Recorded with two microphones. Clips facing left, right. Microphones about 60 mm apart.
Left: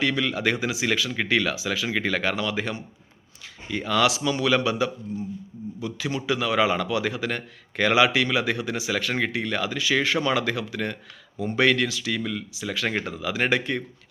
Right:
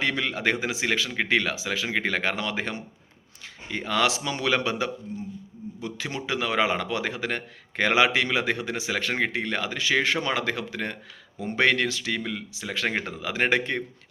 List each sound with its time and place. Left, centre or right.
0.0 s speech: right
1.1 s speech: right